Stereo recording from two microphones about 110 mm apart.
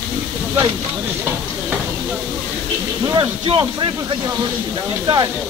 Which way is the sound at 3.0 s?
40° right (ahead or behind).